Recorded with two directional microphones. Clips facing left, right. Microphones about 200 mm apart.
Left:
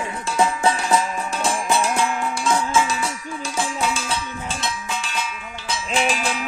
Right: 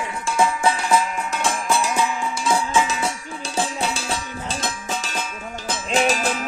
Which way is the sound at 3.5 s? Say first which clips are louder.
Even; 35° right (ahead or behind).